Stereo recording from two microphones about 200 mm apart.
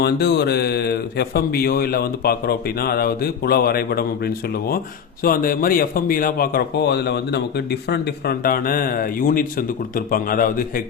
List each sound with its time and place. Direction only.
0.0 s a man's voice: 55° left (ahead or behind)